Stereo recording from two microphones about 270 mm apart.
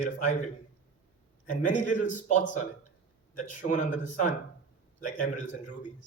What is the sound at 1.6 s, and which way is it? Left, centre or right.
A man's voice, left.